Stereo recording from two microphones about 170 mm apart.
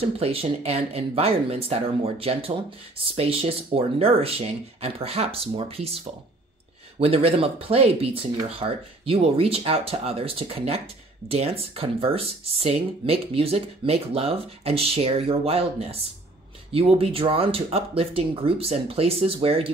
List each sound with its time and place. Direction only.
0.0 s speech: 35° right (ahead or behind)